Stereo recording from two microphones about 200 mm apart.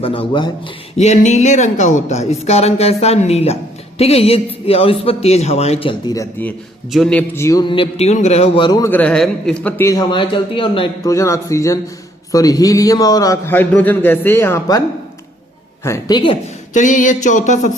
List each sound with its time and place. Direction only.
0.0 s speech: 25° left (ahead or behind)
6.9 s a man's voice: 5° left (ahead or behind); by 11.1 s 25° left (ahead or behind)
11.1 s a man's voice: 15° left (ahead or behind)
16.7 s speech: 40° left (ahead or behind)